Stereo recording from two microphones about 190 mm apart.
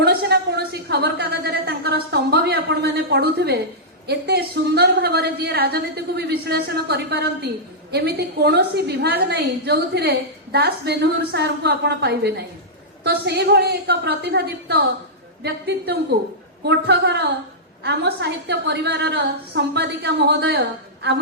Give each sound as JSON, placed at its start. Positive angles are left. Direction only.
{"t": 0.0, "sound": "a woman's voice", "side_deg": -60}